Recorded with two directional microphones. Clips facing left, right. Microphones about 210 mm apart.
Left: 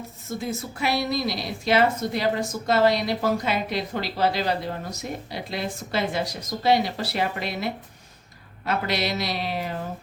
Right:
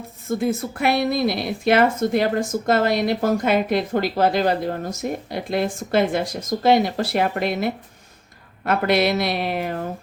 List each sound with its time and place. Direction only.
0.3 s a woman's voice: 55° right (ahead or behind)